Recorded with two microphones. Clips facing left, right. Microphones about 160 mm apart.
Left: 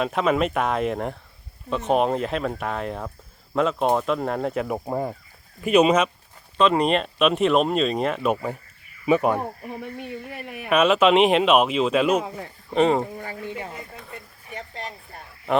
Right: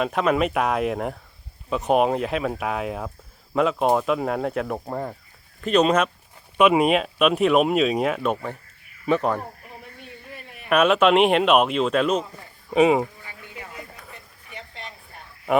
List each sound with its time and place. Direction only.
0.0 s speech: centre (ahead or behind)
8.3 s speech: 10° left (ahead or behind)
9.8 s speech: 65° left (ahead or behind)
10.7 s speech: centre (ahead or behind)
14.5 s a sound: 40° left (ahead or behind)
15.5 s speech: 5° right (ahead or behind)